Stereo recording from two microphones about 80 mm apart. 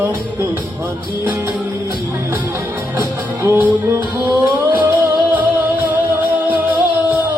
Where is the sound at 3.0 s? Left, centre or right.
Right.